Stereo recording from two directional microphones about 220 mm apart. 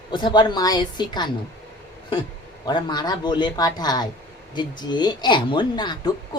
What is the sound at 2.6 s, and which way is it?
A man's voice, 20° left (ahead or behind).